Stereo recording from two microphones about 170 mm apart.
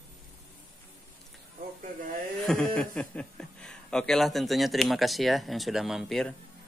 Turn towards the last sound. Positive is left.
turn(degrees=0)  # may be behind; listen again after turning